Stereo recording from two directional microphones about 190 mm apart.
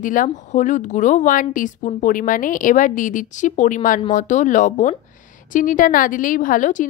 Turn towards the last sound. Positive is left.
turn(degrees=45)  # may be behind; listen again after turning